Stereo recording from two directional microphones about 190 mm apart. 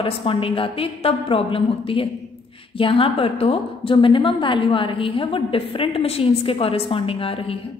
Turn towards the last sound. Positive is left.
turn(degrees=30)  # may be behind; listen again after turning